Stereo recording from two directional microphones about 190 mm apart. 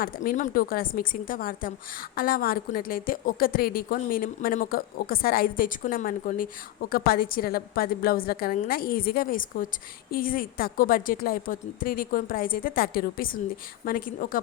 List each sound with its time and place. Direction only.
0.0 s a woman's voice: 50° left (ahead or behind)